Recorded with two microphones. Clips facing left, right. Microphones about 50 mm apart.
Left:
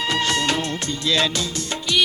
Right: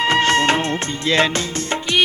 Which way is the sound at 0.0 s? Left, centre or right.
Right.